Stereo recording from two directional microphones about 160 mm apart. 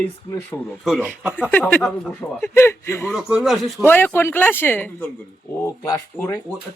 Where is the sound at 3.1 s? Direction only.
5° right (ahead or behind).